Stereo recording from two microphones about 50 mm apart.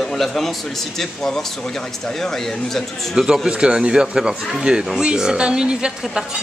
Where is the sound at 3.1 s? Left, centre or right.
Centre.